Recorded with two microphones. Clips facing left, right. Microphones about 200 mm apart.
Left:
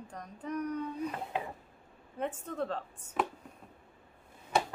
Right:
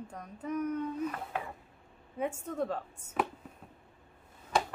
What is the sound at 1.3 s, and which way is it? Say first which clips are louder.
Speech: left 1 dB; 20° left (ahead or behind).